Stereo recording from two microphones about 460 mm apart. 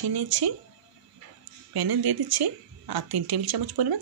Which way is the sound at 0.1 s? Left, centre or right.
Right.